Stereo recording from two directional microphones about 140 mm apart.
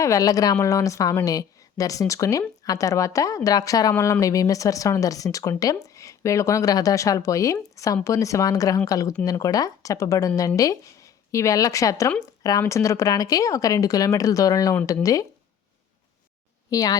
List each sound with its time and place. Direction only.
0.0 s a woman's voice: 25° left (ahead or behind)
16.6 s a woman's voice: 25° left (ahead or behind)